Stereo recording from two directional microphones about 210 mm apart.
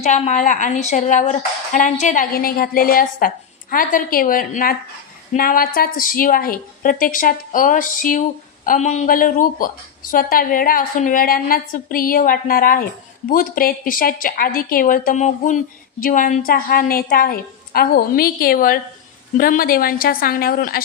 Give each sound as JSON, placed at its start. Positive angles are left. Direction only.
{"t": 0.0, "sound": "a woman's voice", "side_deg": 35}